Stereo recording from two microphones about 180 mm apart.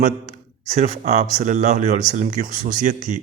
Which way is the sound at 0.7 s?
40° right (ahead or behind).